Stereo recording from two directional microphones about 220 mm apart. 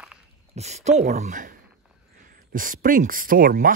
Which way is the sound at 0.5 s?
30° right (ahead or behind).